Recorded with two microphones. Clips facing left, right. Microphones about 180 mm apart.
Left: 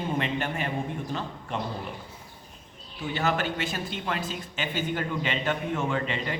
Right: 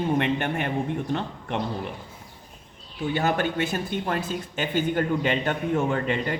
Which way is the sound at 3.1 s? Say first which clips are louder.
Right 3 dB; 50° right (ahead or behind).